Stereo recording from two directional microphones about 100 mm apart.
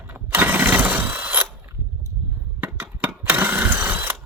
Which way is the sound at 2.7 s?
25° right (ahead or behind).